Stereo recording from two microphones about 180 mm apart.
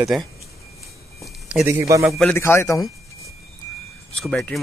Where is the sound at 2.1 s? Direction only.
10° left (ahead or behind).